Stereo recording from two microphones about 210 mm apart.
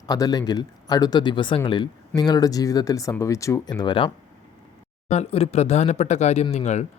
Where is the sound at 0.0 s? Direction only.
20° left (ahead or behind).